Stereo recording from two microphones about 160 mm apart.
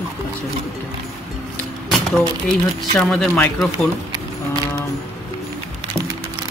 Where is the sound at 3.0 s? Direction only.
5° left (ahead or behind).